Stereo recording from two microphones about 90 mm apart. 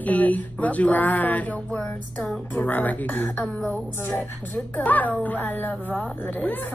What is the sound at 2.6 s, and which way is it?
A woman's voice, 20° left (ahead or behind).